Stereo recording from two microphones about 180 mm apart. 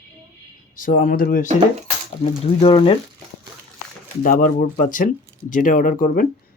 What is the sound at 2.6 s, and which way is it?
Speech, 30° left (ahead or behind).